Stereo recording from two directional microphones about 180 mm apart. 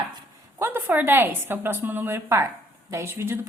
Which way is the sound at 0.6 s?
15° right (ahead or behind).